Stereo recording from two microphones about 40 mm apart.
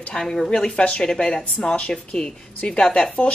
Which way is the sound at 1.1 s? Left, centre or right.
Centre.